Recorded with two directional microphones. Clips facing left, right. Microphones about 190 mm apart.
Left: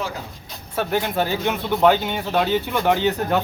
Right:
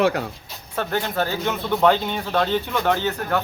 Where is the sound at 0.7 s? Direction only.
15° left (ahead or behind).